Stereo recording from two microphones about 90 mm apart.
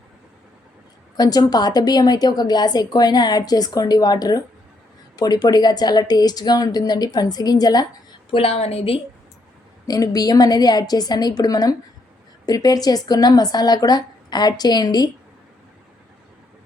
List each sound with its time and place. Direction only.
1.1 s a woman's voice: 45° left (ahead or behind)
8.3 s a woman's voice: 90° left
9.8 s a woman's voice: 45° left (ahead or behind)